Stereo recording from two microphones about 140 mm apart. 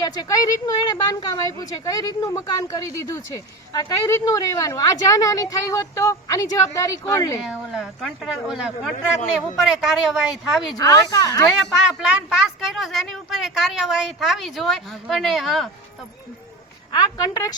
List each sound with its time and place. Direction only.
0.0 s a woman's voice: 25° left (ahead or behind)
7.4 s speech: 5° right (ahead or behind)
10.8 s a woman's voice: 25° left (ahead or behind)
11.9 s speech: 5° right (ahead or behind)
16.9 s a woman's voice: 30° left (ahead or behind)